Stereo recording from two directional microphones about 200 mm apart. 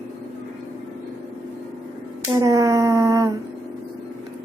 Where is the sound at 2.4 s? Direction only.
15° right (ahead or behind).